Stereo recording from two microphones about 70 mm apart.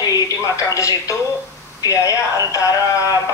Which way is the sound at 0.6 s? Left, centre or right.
Left.